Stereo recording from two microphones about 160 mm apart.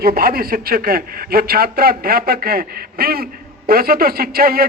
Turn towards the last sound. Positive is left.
turn(degrees=-70)  # may be behind; listen again after turning